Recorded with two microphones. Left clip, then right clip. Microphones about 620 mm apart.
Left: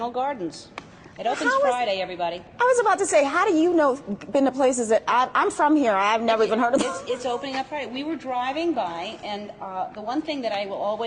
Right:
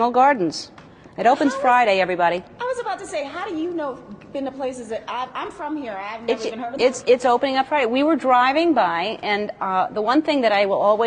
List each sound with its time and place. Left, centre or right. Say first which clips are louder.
0.0 s a woman's voice: right 10 dB; right
2.6 s a woman's voice: left 6 dB; left
7.1 s a woman's voice: right 10 dB; right